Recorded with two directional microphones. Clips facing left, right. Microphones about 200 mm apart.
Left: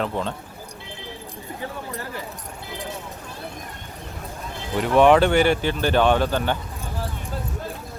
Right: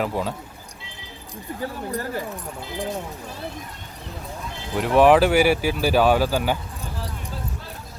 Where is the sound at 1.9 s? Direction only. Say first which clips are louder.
Right 5 dB; 45° right (ahead or behind).